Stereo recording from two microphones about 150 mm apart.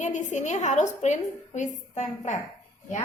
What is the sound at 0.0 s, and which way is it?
A woman's voice, 55° left (ahead or behind).